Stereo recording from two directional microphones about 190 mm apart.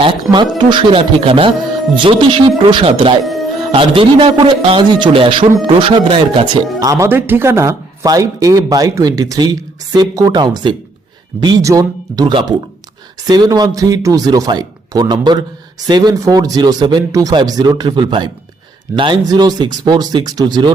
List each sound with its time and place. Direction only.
0.0 s speech: 25° right (ahead or behind)